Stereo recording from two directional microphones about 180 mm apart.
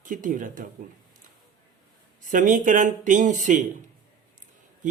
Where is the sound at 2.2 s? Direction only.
45° right (ahead or behind).